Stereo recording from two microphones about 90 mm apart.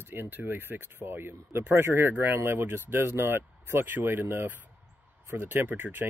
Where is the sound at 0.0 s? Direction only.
25° right (ahead or behind).